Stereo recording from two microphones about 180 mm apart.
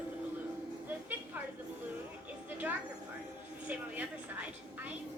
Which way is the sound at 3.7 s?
10° right (ahead or behind).